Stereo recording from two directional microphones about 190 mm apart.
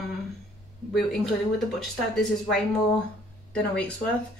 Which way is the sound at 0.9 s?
Centre (ahead or behind).